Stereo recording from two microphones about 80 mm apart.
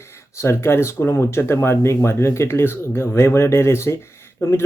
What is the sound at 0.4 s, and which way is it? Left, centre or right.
Speech, left.